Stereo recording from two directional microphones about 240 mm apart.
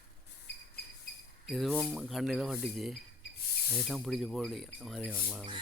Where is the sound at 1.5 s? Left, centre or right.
Centre.